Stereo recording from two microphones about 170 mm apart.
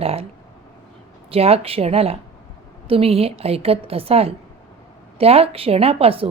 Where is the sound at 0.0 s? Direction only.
35° right (ahead or behind).